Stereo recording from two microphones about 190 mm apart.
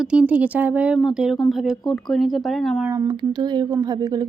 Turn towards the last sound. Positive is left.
turn(degrees=-20)  # may be behind; listen again after turning